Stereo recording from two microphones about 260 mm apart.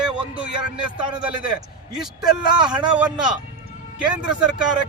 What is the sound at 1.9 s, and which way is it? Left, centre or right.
Speech, centre.